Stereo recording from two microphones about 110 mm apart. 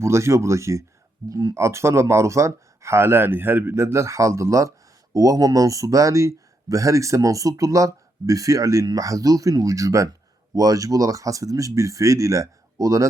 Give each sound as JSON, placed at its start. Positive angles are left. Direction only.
{"t": 0.0, "sound": "speech", "side_deg": -25}